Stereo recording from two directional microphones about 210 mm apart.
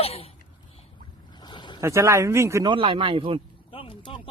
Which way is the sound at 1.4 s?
20° left (ahead or behind).